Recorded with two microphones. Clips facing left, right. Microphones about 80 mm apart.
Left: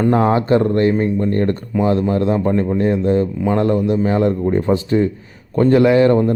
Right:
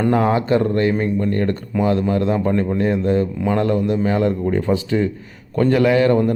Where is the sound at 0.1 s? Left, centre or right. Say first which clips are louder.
Left 2 dB; left.